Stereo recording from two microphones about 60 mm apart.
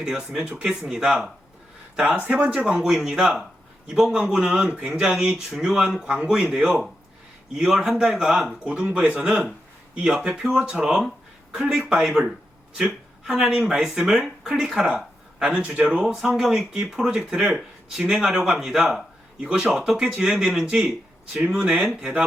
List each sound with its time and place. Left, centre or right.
0.0 s speech: centre
2.2 s speech: centre
2.6 s speech: centre
8.5 s speech: centre
9.3 s speech: centre
9.9 s speech: centre